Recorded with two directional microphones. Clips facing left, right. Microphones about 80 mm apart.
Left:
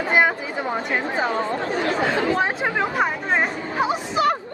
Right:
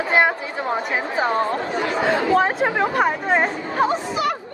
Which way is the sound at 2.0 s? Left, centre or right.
Centre.